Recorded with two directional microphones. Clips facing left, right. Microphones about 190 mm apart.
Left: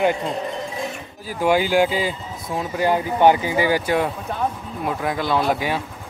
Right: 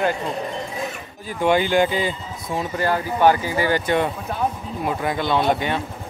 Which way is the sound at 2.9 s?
15° left (ahead or behind).